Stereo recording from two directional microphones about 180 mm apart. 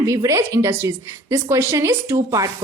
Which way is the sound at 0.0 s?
15° right (ahead or behind).